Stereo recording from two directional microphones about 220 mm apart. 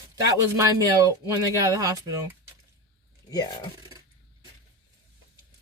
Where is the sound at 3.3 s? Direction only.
15° left (ahead or behind).